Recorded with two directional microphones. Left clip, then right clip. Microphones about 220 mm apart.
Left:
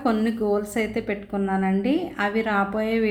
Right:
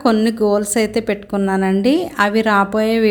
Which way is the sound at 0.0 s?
45° right (ahead or behind).